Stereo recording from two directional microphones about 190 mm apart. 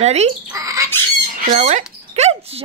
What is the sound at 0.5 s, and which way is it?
Squawk, 15° right (ahead or behind).